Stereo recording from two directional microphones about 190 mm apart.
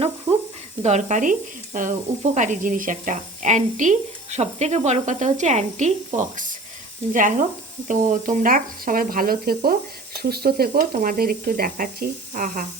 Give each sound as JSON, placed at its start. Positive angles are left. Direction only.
{"t": 0.8, "sound": "speech", "side_deg": -35}